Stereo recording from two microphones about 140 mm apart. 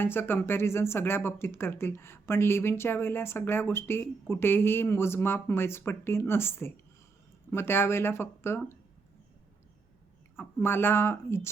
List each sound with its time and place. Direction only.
0.0 s speech: 15° left (ahead or behind)
10.3 s speech: 15° left (ahead or behind)